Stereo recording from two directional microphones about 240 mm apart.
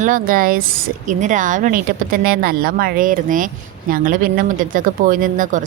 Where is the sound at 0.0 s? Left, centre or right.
Right.